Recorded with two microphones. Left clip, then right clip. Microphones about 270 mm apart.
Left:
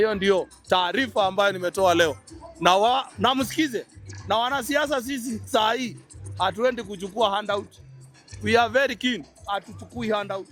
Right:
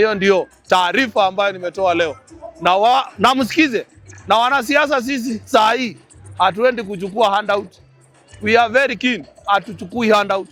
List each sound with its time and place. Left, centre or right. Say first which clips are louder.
0.0 s a man's voice: right 7 dB; centre
9.5 s speech: right 12 dB; centre